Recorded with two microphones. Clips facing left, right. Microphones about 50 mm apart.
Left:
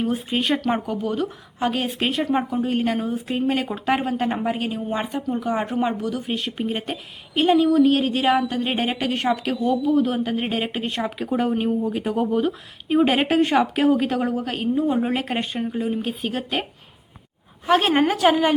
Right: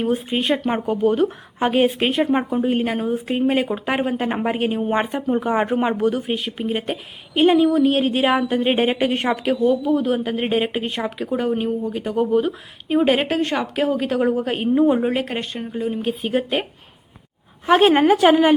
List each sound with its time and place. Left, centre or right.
0.0 s a woman's voice: centre
0.9 s speech: right
2.0 s a woman's voice: centre
4.3 s a woman's voice: right
6.3 s a woman's voice: centre; by 9.4 s right
9.4 s a woman's voice: centre
17.7 s a woman's voice: centre